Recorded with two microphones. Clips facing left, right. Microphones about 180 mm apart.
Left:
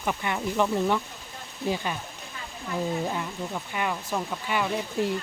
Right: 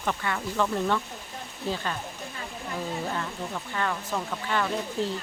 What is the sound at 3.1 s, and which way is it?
Speech, 15° left (ahead or behind).